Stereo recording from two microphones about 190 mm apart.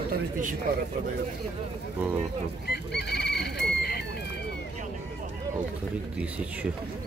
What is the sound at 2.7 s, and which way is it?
Chicken, 60° left (ahead or behind).